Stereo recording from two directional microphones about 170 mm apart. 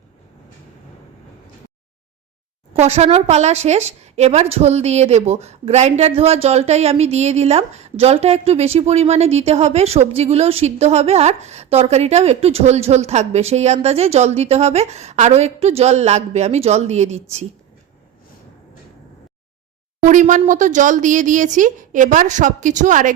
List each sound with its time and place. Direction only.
2.7 s a woman's voice: 40° right (ahead or behind)
20.0 s speech: 45° right (ahead or behind)